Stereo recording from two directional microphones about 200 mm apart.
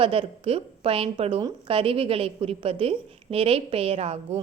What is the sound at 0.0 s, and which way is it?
A woman's voice, 25° right (ahead or behind).